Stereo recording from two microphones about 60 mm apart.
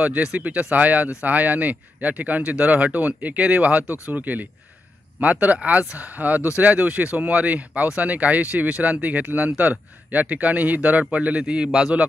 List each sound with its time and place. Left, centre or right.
0.0 s speech: right